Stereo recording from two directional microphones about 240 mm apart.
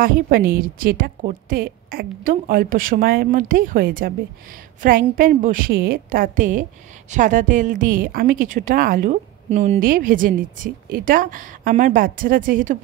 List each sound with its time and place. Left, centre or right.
0.0 s a woman's voice: right